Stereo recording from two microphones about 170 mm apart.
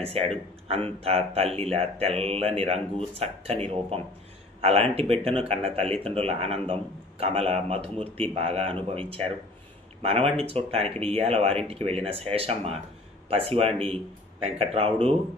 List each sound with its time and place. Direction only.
0.0 s speech: 35° right (ahead or behind)